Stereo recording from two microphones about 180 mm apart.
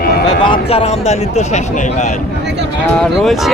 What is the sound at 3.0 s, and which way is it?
Speech, centre (ahead or behind).